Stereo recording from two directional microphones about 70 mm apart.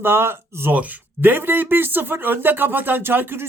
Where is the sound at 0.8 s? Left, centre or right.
Right.